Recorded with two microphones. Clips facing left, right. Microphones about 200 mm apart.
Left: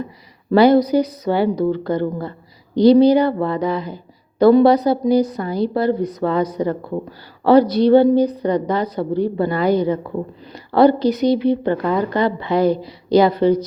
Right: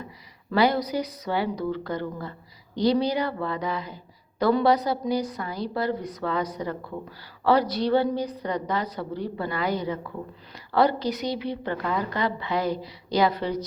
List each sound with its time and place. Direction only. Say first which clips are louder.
0.5 s a woman's voice: left 11 dB; 25° left (ahead or behind)
11.8 s speech: left 8 dB; 45° left (ahead or behind)
12.1 s a woman's voice: left 9 dB; 25° left (ahead or behind)